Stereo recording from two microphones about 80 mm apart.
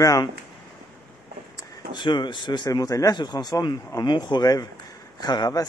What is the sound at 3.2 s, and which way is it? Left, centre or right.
Speech, left.